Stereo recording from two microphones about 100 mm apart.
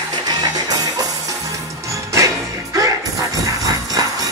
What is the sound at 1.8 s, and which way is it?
Music, 30° right (ahead or behind).